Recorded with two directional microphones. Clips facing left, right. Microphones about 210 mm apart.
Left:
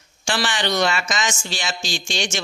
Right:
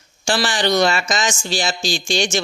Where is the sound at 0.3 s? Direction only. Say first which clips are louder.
Right 4 dB; 35° right (ahead or behind).